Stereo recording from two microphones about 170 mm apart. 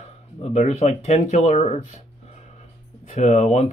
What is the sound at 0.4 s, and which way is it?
Speech, 40° left (ahead or behind).